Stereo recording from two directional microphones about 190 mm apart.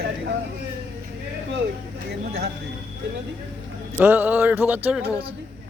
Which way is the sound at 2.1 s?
60° right (ahead or behind).